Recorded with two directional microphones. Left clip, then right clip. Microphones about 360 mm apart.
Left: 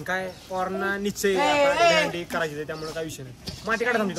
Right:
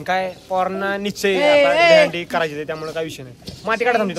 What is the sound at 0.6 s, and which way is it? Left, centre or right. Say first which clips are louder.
Speech: right 5 dB; centre.